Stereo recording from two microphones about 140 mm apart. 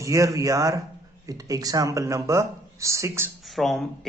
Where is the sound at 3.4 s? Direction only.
Centre (ahead or behind).